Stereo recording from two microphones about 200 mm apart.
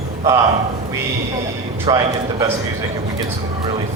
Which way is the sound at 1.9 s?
25° right (ahead or behind).